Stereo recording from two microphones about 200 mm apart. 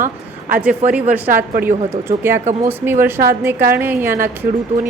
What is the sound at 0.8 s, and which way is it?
Speech, 35° right (ahead or behind).